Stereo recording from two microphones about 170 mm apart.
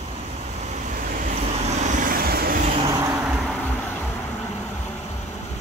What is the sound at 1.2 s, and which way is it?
Vehicle, 45° right (ahead or behind).